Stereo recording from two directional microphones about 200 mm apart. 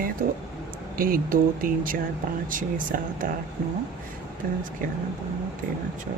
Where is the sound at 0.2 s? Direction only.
40° right (ahead or behind).